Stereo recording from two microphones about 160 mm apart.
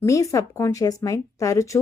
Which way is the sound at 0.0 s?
20° left (ahead or behind).